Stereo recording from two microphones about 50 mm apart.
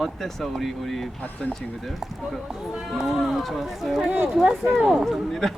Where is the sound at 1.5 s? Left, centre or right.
Centre.